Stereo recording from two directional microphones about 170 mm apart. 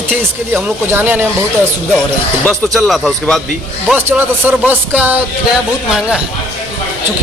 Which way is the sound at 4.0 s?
10° right (ahead or behind).